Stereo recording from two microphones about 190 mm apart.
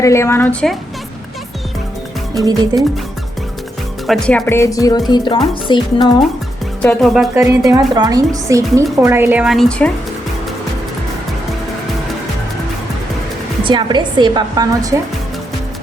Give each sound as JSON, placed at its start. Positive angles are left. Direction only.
{"t": 0.0, "sound": "speech", "side_deg": 15}
{"t": 2.4, "sound": "a woman's voice", "side_deg": -20}
{"t": 4.0, "sound": "speech", "side_deg": 5}
{"t": 6.8, "sound": "speech", "side_deg": 0}
{"t": 7.7, "sound": "speech", "side_deg": -20}
{"t": 13.7, "sound": "a woman's voice", "side_deg": -25}